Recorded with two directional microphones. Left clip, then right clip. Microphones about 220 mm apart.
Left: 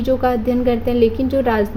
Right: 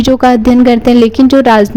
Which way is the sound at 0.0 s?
45° right (ahead or behind).